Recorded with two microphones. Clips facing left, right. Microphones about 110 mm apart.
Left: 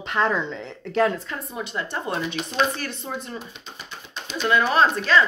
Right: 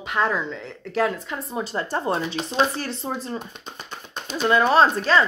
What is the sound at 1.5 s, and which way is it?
Speech, 35° right (ahead or behind).